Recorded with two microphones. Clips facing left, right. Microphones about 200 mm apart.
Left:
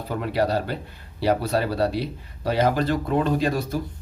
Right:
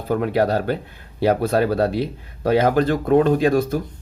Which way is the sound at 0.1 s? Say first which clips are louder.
Right 5 dB; 50° right (ahead or behind).